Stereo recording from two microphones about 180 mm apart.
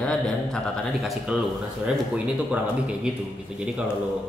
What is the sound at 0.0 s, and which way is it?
A man's voice, 5° left (ahead or behind).